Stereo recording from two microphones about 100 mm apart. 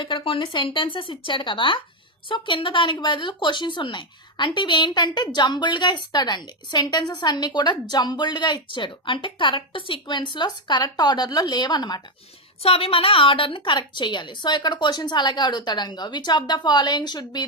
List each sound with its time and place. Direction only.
0.0 s speech: 60° left (ahead or behind)
12.6 s speech: 75° left (ahead or behind); by 17.4 s 45° left (ahead or behind)